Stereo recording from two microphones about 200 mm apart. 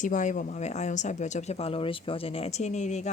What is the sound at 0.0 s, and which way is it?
Speech, 40° left (ahead or behind).